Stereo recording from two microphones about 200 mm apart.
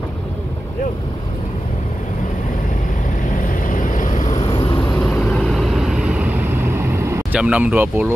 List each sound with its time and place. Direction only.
3.4 s vehicle: 40° left (ahead or behind)
5.0 s vehicle: centre (ahead or behind)